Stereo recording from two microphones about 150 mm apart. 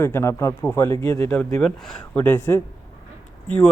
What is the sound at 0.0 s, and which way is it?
Speech, 15° left (ahead or behind).